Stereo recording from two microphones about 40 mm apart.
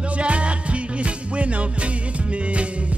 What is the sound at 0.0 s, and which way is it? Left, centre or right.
Music, right.